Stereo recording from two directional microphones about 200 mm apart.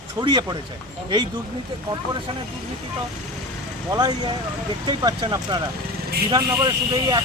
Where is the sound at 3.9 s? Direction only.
20° right (ahead or behind).